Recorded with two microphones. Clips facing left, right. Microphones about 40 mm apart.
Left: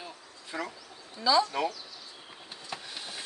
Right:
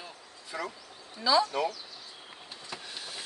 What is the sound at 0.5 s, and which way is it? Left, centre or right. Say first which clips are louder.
Speech: even; left.